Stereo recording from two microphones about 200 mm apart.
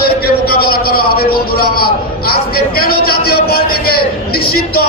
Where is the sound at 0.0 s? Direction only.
50° left (ahead or behind).